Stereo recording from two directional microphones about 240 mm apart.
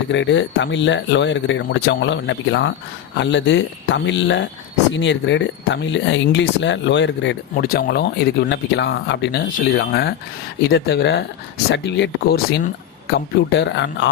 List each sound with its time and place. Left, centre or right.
0.1 s speech: left